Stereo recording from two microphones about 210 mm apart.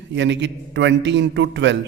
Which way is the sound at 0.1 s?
55° right (ahead or behind).